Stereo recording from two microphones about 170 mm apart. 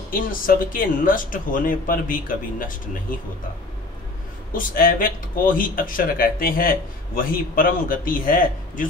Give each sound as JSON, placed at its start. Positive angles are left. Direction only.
{"t": 0.1, "sound": "speech", "side_deg": 55}
{"t": 4.5, "sound": "speech", "side_deg": 55}